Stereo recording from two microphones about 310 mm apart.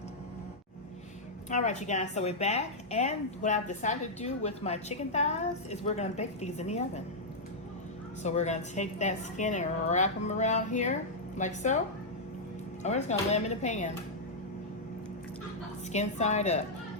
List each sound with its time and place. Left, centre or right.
1.5 s a woman's voice: left
8.2 s a woman's voice: left
12.8 s a woman's voice: left
15.9 s a woman's voice: left